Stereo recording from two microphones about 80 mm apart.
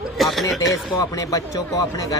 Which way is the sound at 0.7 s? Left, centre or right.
Left.